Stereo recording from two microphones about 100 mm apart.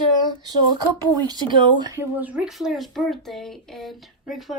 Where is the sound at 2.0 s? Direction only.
15° right (ahead or behind).